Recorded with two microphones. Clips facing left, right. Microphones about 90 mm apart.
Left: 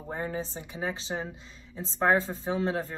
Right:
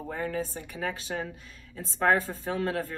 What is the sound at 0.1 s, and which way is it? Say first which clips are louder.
Speech: right 1 dB; 25° left (ahead or behind).